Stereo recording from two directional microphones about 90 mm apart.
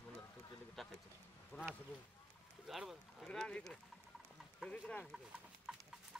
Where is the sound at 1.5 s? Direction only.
20° left (ahead or behind).